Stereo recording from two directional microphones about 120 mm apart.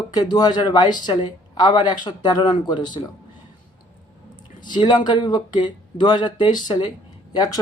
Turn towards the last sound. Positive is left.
turn(degrees=35)  # may be behind; listen again after turning